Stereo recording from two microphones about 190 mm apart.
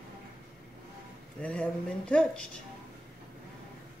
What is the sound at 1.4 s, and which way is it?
Speech, 5° left (ahead or behind).